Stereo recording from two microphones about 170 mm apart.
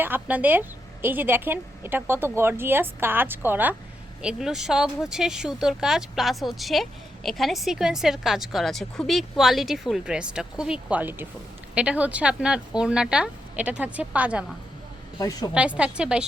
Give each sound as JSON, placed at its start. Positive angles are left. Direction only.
{"t": 0.0, "sound": "a woman's voice", "side_deg": -10}
{"t": 15.2, "sound": "a woman's voice", "side_deg": 20}
{"t": 15.5, "sound": "a woman's voice", "side_deg": -5}